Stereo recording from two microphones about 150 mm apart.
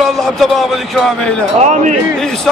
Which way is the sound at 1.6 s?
55° right (ahead or behind).